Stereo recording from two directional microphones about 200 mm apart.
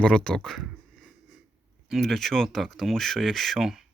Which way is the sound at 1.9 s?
Centre (ahead or behind).